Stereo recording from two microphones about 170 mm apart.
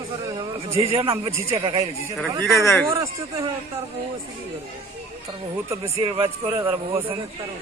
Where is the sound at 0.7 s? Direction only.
35° right (ahead or behind).